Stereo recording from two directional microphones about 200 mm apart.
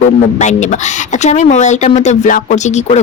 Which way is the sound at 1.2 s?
35° left (ahead or behind).